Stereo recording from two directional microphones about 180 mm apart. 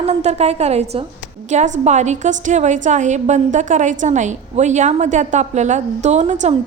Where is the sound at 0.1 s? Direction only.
35° right (ahead or behind).